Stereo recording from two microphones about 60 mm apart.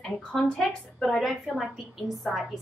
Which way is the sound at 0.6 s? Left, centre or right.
Centre.